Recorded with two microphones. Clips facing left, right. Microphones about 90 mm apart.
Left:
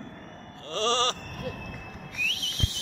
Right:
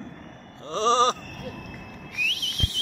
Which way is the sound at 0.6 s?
20° right (ahead or behind).